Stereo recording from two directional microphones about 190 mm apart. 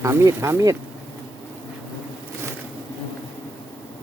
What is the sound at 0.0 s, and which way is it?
Speech, 15° right (ahead or behind).